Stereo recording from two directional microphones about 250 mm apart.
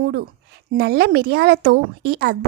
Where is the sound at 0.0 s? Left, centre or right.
Right.